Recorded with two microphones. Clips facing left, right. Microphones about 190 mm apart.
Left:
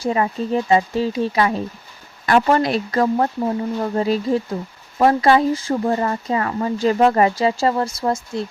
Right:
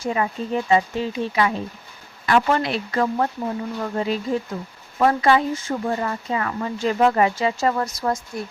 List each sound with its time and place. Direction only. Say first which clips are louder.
0.0 s speech: left 4 dB; 35° left (ahead or behind)